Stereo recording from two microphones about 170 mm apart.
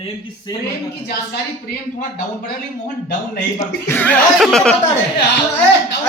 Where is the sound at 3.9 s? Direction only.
10° left (ahead or behind).